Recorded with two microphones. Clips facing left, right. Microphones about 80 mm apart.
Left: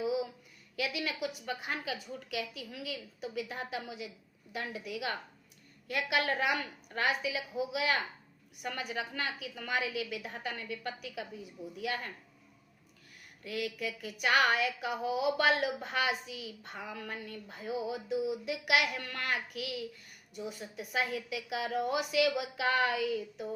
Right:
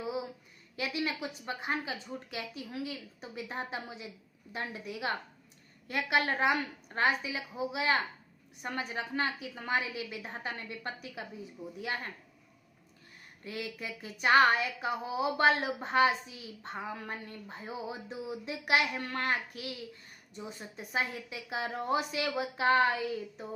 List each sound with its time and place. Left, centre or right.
0.8 s a woman's voice: right
13.4 s a woman's voice: right